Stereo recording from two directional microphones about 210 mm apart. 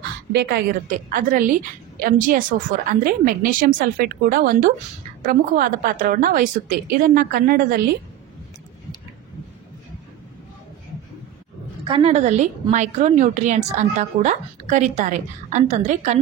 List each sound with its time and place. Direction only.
0.3 s a woman's voice: 50° right (ahead or behind)
11.9 s a woman's voice: 30° right (ahead or behind)